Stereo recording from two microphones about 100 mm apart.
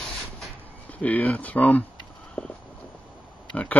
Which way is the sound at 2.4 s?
15° left (ahead or behind).